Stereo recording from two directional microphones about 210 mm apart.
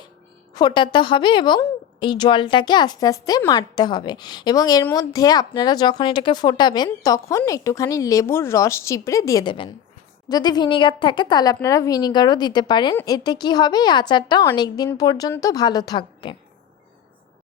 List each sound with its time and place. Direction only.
0.5 s a woman's voice: 20° left (ahead or behind)